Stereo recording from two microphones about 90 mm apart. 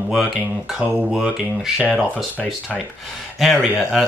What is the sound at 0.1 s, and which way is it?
Speech, centre (ahead or behind).